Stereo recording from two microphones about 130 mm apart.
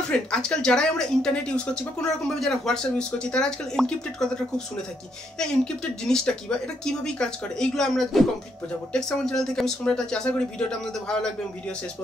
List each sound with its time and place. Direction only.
0.1 s speech: 5° left (ahead or behind)